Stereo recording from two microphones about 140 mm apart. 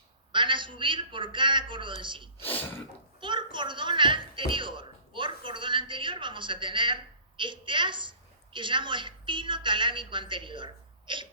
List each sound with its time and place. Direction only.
0.3 s speech: 35° right (ahead or behind)
2.4 s speech: 15° left (ahead or behind)
3.2 s speech: 35° right (ahead or behind)